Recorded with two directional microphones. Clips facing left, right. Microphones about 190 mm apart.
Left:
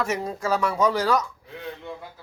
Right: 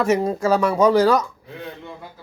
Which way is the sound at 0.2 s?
40° right (ahead or behind).